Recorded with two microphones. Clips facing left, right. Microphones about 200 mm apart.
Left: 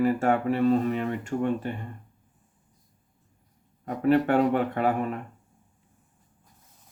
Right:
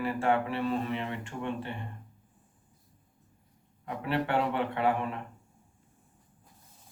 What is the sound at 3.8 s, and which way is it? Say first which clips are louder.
Speech: left 9 dB; 45° left (ahead or behind).